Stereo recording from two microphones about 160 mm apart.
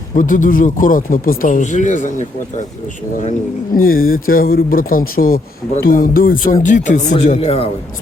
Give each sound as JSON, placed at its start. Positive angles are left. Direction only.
{"t": 0.1, "sound": "speech", "side_deg": 55}
{"t": 3.8, "sound": "speech", "side_deg": 65}